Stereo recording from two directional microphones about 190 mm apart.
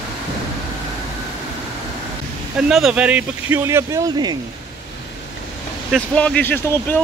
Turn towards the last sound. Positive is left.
turn(degrees=10)  # may be behind; listen again after turning